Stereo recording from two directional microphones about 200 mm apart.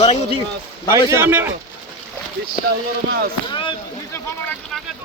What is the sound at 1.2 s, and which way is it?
Speech, 10° right (ahead or behind).